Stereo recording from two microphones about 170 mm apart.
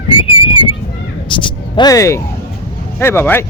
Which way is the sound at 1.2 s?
30° left (ahead or behind).